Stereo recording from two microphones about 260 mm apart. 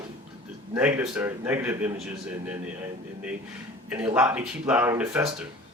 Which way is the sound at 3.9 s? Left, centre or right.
Centre.